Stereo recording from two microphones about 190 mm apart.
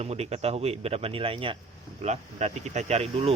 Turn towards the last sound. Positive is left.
turn(degrees=-30)  # may be behind; listen again after turning